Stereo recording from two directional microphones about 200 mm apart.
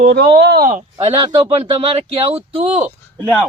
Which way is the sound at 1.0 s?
30° right (ahead or behind).